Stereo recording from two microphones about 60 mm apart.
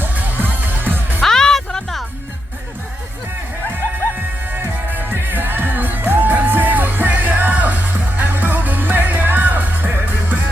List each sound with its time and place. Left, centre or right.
0.0 s music: right
1.2 s music: centre
4.5 s music: right